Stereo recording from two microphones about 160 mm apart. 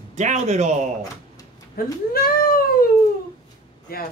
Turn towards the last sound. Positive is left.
turn(degrees=70)  # may be behind; listen again after turning